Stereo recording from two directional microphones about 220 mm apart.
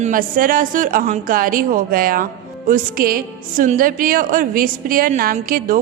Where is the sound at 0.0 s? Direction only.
40° right (ahead or behind).